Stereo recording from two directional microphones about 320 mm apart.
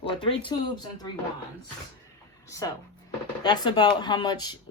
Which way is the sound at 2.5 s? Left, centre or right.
Centre.